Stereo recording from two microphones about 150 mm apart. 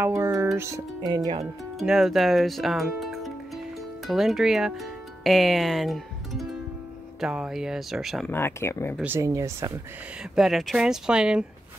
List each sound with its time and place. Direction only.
0.0 s music: 15° right (ahead or behind)
0.6 s speech: 20° right (ahead or behind)
1.8 s speech: centre (ahead or behind)
8.3 s speech: 15° left (ahead or behind)
9.0 s speech: 15° right (ahead or behind)
10.3 s speech: centre (ahead or behind)